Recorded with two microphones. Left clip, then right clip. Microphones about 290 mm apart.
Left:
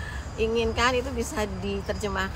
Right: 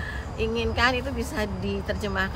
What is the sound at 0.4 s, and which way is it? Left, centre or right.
Speech, centre.